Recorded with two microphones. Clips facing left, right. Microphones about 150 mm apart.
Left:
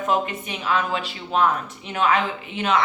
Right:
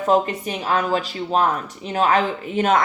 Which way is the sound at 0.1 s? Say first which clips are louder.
Right 6 dB; 35° right (ahead or behind).